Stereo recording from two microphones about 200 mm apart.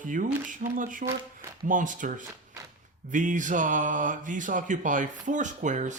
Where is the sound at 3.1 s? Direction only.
40° right (ahead or behind).